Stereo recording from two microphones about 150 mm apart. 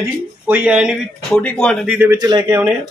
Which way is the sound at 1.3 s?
10° left (ahead or behind).